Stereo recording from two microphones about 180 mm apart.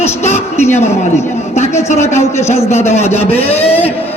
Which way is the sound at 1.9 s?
40° left (ahead or behind).